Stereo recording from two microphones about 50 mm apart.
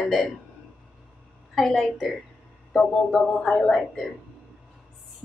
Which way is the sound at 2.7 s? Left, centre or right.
Centre.